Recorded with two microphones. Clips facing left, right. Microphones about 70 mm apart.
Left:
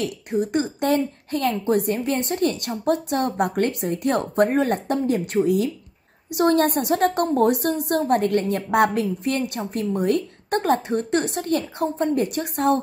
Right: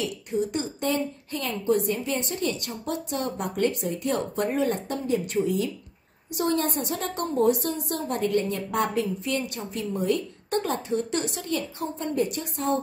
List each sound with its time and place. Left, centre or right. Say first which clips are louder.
0.0 s a woman's voice: left 3 dB; left